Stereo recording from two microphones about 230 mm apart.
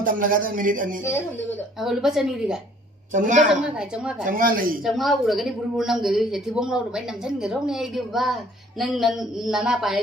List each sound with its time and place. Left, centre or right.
0.0 s a man's voice: right
1.9 s speech: centre
3.1 s a man's voice: right
4.8 s speech: centre